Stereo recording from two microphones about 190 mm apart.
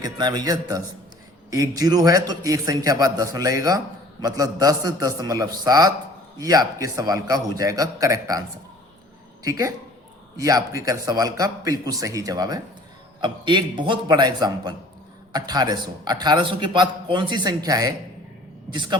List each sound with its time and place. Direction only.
0.0 s a man's voice: 20° right (ahead or behind)